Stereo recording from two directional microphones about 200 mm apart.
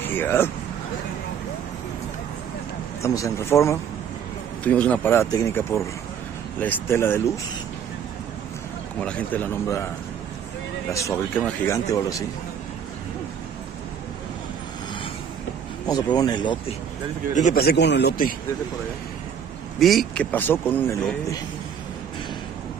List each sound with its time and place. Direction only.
0.0 s speech: 10° left (ahead or behind)
3.0 s speech: 15° left (ahead or behind)
9.0 s speech: 5° left (ahead or behind)
10.9 s speech: 15° left (ahead or behind)
15.9 s speech: 20° left (ahead or behind)
17.3 s a man's voice: 40° left (ahead or behind)
17.6 s a man's voice: 55° left (ahead or behind)
19.8 s speech: centre (ahead or behind)